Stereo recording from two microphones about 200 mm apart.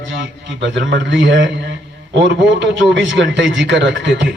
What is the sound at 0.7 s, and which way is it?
A man's voice, 65° right (ahead or behind).